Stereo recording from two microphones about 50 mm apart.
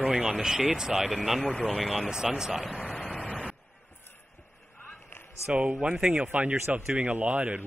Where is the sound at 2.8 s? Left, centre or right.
Left.